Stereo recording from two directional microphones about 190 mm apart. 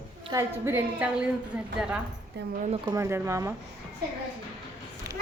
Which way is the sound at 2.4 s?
60° right (ahead or behind).